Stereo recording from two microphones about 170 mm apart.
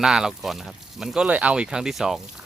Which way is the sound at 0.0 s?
5° right (ahead or behind).